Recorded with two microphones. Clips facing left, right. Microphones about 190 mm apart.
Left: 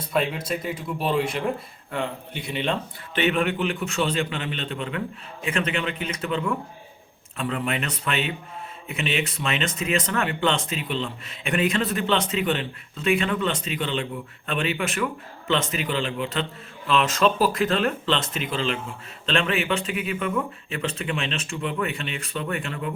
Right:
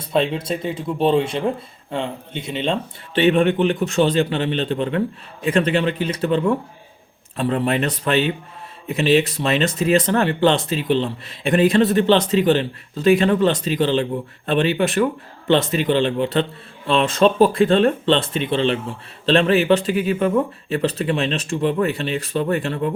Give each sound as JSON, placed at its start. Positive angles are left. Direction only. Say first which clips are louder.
{"t": 0.0, "sound": "speech", "louder": "right 5 dB", "side_deg": -25}